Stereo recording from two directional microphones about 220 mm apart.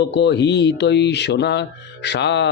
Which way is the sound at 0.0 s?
50° left (ahead or behind).